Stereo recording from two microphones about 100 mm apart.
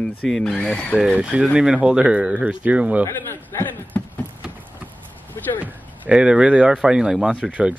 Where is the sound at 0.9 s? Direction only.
15° right (ahead or behind).